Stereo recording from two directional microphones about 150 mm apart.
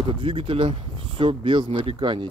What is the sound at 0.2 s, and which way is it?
Speech, 35° right (ahead or behind).